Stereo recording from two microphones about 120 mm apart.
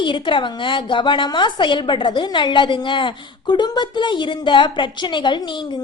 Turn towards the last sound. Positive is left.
turn(degrees=40)  # may be behind; listen again after turning